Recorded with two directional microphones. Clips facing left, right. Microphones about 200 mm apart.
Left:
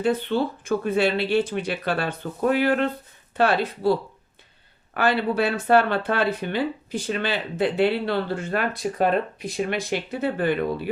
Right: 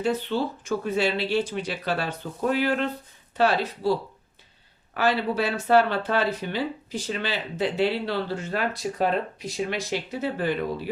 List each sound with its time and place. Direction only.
0.0 s speech: 55° left (ahead or behind)
4.9 s speech: 55° left (ahead or behind)